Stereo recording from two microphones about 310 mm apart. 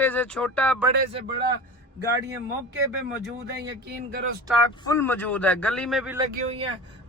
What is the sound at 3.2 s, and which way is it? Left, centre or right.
Speech, right.